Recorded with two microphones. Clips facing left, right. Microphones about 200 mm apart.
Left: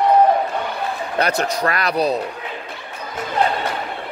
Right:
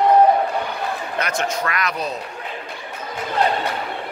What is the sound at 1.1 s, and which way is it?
Speech, 35° left (ahead or behind).